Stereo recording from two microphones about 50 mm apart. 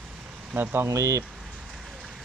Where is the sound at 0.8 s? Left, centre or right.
Right.